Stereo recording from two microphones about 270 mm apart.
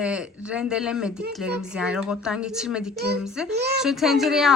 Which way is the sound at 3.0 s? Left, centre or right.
Right.